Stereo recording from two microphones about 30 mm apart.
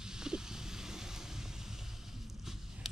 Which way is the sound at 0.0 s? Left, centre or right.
Right.